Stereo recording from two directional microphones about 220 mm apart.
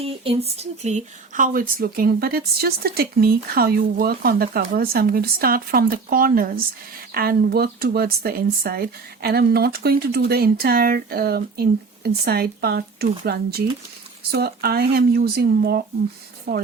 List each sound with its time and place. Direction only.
0.0 s speech: 25° right (ahead or behind); by 16.6 s 50° right (ahead or behind)